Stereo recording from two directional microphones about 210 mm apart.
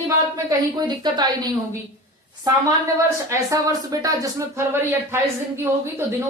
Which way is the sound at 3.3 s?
15° right (ahead or behind).